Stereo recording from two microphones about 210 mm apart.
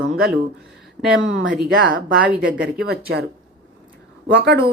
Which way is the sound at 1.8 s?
60° right (ahead or behind).